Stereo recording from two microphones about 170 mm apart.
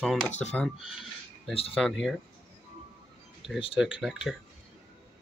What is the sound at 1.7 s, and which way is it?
Speech, centre (ahead or behind).